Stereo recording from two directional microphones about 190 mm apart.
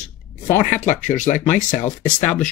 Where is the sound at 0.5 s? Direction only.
40° left (ahead or behind).